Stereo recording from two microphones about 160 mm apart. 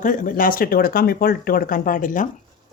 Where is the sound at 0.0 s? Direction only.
55° left (ahead or behind).